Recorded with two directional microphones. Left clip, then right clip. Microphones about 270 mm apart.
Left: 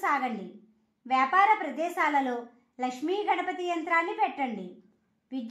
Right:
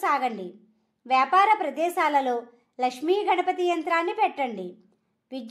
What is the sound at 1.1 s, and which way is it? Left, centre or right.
A woman's voice, right.